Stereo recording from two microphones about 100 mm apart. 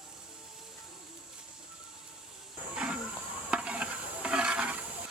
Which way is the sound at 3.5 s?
10° right (ahead or behind).